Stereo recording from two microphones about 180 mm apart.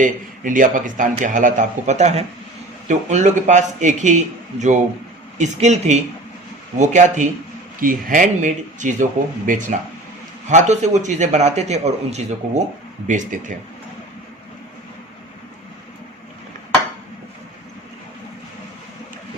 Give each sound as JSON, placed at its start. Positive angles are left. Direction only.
{"t": 0.0, "sound": "a man's voice", "side_deg": -45}
{"t": 5.4, "sound": "a man's voice", "side_deg": -40}